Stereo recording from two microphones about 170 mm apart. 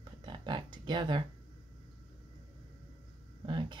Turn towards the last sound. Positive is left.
turn(degrees=-30)  # may be behind; listen again after turning